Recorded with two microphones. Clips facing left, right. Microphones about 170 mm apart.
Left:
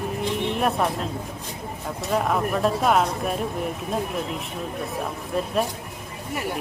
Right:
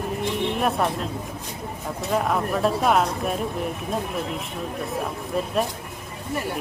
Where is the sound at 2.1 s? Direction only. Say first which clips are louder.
Even; centre (ahead or behind).